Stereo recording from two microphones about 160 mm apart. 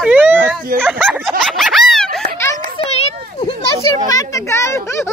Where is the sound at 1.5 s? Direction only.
Centre (ahead or behind).